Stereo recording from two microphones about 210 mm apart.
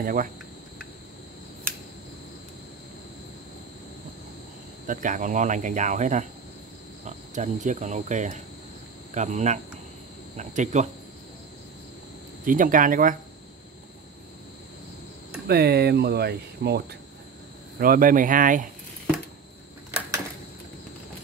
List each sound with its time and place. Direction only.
0.0 s speech: 40° right (ahead or behind)
4.8 s speech: 35° right (ahead or behind)
12.4 s speech: 40° right (ahead or behind)
15.4 s speech: 50° right (ahead or behind)